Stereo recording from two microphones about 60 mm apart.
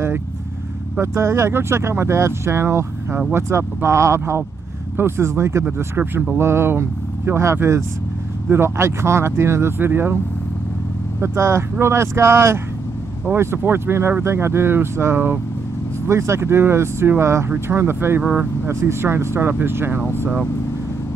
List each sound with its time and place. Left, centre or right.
1.0 s speech: right
11.1 s speech: right